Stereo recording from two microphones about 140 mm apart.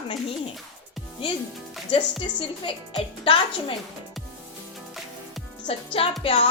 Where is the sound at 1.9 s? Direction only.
35° left (ahead or behind).